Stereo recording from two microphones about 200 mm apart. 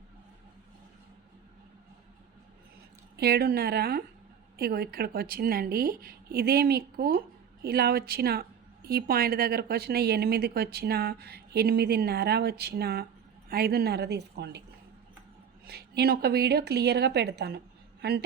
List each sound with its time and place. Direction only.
3.2 s a woman's voice: 55° right (ahead or behind)
15.6 s a woman's voice: 50° right (ahead or behind)